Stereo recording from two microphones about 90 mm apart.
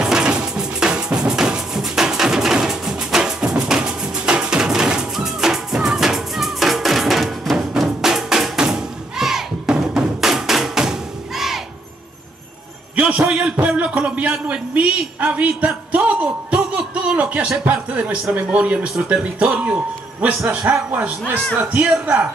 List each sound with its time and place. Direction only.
0.0 s drum: 10° right (ahead or behind)
12.9 s a man's voice: 15° right (ahead or behind)